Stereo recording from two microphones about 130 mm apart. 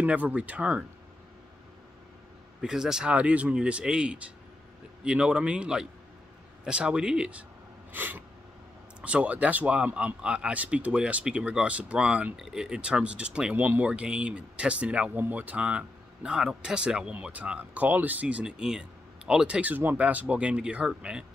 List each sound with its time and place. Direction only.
0.0 s speech: 10° right (ahead or behind)
2.6 s speech: 5° right (ahead or behind)
7.9 s sneeze: 15° right (ahead or behind)
9.0 s speech: 10° right (ahead or behind)